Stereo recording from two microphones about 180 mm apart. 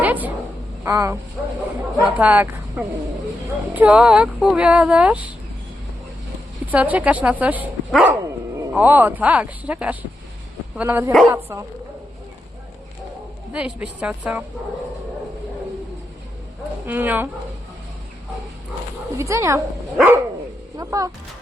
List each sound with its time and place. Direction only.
0.0 s a sound: 10° right (ahead or behind)
0.9 s speech: 15° right (ahead or behind)
2.1 s speech: 10° right (ahead or behind)
6.7 s speech: 10° right (ahead or behind)
13.5 s speech: 5° right (ahead or behind)
16.8 s speech: 10° right (ahead or behind)
19.1 s speech: 15° right (ahead or behind)